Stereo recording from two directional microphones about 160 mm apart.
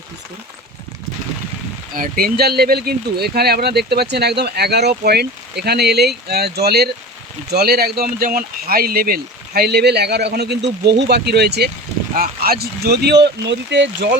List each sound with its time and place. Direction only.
2.0 s speech: 70° right (ahead or behind); by 11.7 s 90° right
12.1 s speech: 70° right (ahead or behind); by 14.1 s 90° right